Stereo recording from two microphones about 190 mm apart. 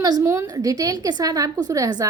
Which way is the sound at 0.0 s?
15° right (ahead or behind).